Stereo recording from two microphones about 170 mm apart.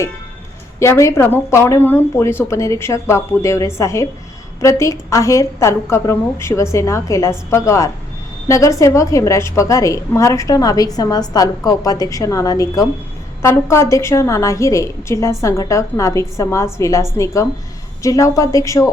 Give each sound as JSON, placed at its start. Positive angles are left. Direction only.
{"t": 0.8, "sound": "a woman's voice", "side_deg": 15}